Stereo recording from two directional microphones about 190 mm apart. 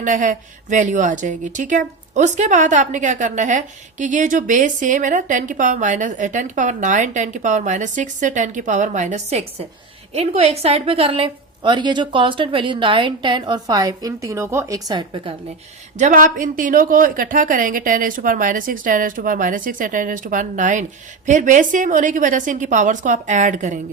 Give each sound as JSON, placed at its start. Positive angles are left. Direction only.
{"t": 0.0, "sound": "a woman's voice", "side_deg": -40}
{"t": 16.0, "sound": "a woman's voice", "side_deg": -40}